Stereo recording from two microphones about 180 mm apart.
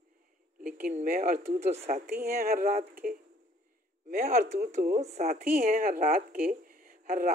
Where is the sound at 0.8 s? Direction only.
50° right (ahead or behind).